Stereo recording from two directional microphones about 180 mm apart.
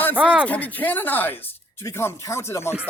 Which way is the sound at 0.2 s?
5° right (ahead or behind).